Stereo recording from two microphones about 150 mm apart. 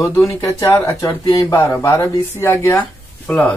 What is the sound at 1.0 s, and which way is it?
Speech, 35° left (ahead or behind).